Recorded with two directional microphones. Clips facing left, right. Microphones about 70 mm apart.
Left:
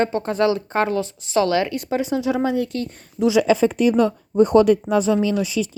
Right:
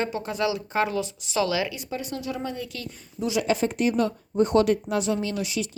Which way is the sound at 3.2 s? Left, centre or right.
Left.